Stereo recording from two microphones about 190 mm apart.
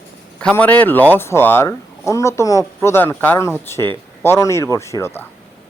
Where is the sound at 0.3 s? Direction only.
5° left (ahead or behind).